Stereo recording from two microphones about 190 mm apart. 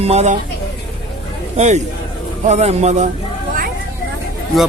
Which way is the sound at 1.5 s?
35° right (ahead or behind).